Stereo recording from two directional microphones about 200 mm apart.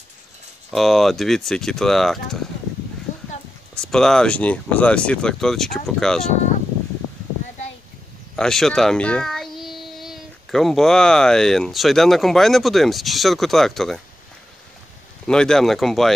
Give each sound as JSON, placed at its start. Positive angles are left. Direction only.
{"t": 0.7, "sound": "speech", "side_deg": 0}
{"t": 3.1, "sound": "horse", "side_deg": 35}
{"t": 3.7, "sound": "speech", "side_deg": 5}
{"t": 8.4, "sound": "a child's voice", "side_deg": 0}
{"t": 15.2, "sound": "speech", "side_deg": 5}